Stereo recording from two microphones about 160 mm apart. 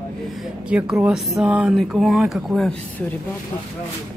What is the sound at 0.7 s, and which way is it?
Speech, 5° right (ahead or behind).